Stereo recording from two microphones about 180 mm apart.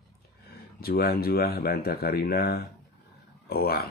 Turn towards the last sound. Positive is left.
turn(degrees=60)  # may be behind; listen again after turning